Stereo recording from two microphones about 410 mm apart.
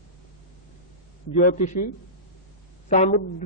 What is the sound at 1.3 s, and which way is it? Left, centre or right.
Speech, centre.